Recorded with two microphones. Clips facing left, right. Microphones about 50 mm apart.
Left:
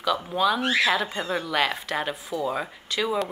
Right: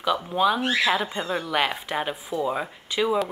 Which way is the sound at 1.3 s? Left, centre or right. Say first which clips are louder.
Even; centre.